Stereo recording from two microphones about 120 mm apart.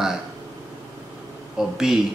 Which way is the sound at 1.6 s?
5° right (ahead or behind).